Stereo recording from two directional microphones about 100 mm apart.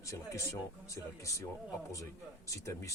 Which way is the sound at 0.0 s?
30° left (ahead or behind).